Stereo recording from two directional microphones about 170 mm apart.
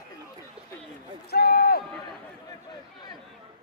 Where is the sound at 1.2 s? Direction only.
65° left (ahead or behind).